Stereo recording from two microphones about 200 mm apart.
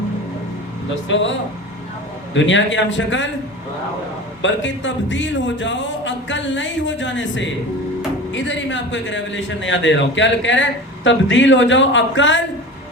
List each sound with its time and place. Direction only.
2.3 s speech: 65° left (ahead or behind)
4.4 s a man's voice: 65° left (ahead or behind)